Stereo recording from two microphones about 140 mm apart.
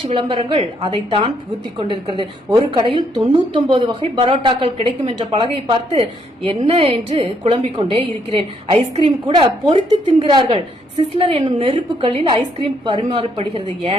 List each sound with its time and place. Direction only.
0.0 s a woman's voice: 45° right (ahead or behind)